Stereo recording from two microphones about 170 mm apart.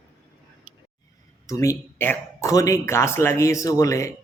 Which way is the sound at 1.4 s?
20° left (ahead or behind).